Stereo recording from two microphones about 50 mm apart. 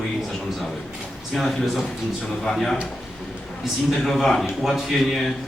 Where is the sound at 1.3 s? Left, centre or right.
Centre.